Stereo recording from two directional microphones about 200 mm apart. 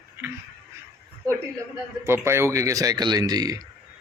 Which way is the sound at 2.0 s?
10° right (ahead or behind).